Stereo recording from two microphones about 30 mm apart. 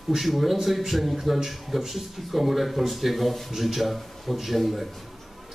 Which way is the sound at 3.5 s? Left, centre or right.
Centre.